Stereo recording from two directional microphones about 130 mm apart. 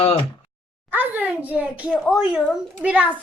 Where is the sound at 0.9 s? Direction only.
15° right (ahead or behind).